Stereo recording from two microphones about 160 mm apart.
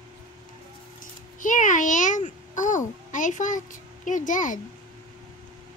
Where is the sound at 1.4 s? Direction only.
55° left (ahead or behind).